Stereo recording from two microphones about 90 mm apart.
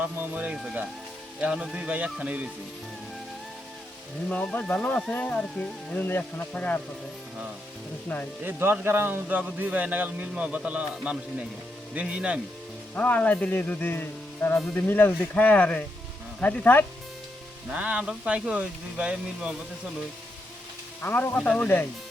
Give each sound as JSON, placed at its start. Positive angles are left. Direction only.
{"t": 0.0, "sound": "speech", "side_deg": -15}
{"t": 4.7, "sound": "speech", "side_deg": 15}
{"t": 5.4, "sound": "speech", "side_deg": 5}
{"t": 5.9, "sound": "speech", "side_deg": 25}
{"t": 8.1, "sound": "speech", "side_deg": 15}
{"t": 8.4, "sound": "speech", "side_deg": -20}
{"t": 13.0, "sound": "speech", "side_deg": 15}
{"t": 17.7, "sound": "speech", "side_deg": -15}
{"t": 21.0, "sound": "speech", "side_deg": 25}